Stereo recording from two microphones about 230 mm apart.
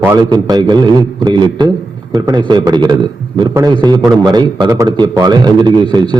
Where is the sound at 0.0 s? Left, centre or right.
Centre.